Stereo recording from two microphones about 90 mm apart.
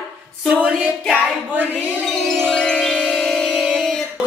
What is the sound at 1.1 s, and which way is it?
Speech, 20° right (ahead or behind).